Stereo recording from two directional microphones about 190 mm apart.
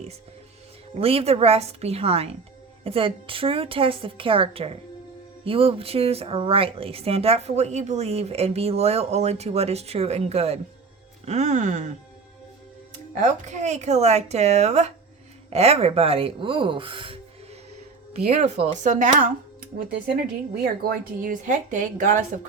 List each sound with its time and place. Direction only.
0.9 s a woman's voice: 30° right (ahead or behind)
13.1 s a woman's voice: 40° right (ahead or behind)
20.6 s a woman's voice: 50° right (ahead or behind)